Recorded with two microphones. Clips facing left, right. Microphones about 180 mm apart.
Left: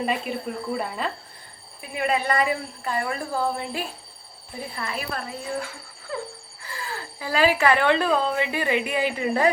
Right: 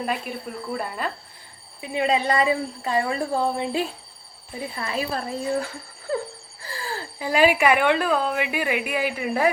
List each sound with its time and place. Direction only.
0.0 s speech: centre (ahead or behind)
1.8 s speech: 25° right (ahead or behind)
4.9 s speech: 30° right (ahead or behind)
6.1 s a sound: 35° right (ahead or behind)
7.2 s a woman's voice: 15° right (ahead or behind)